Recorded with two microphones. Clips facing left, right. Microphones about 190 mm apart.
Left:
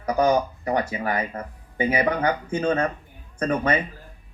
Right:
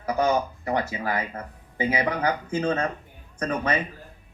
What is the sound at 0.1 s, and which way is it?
Speech, 35° left (ahead or behind).